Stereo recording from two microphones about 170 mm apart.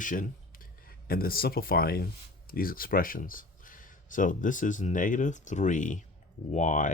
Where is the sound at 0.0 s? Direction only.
50° left (ahead or behind).